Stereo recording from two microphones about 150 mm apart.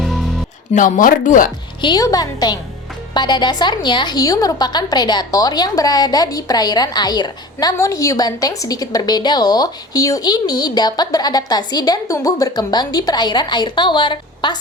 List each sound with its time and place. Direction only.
0.7 s speech: 60° left (ahead or behind)
1.8 s a woman's voice: 25° left (ahead or behind)